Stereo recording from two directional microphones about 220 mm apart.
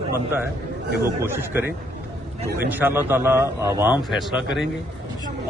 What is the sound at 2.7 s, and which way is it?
A man's voice, 10° right (ahead or behind).